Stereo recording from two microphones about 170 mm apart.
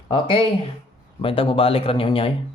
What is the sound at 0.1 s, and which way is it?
A man's voice, 30° left (ahead or behind).